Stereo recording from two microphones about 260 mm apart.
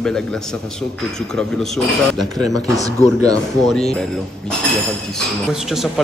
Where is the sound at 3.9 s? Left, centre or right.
Centre.